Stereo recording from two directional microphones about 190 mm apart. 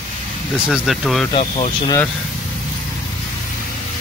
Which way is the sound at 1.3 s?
30° left (ahead or behind).